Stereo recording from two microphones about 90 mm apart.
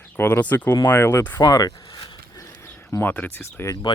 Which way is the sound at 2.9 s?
20° left (ahead or behind).